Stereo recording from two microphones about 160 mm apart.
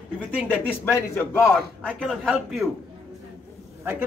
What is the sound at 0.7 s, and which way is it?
Speech, 15° left (ahead or behind).